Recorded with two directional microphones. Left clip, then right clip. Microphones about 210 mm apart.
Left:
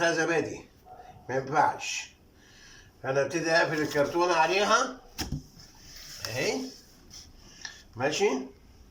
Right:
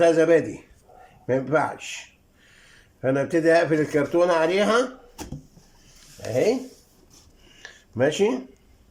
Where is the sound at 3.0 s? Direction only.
40° right (ahead or behind).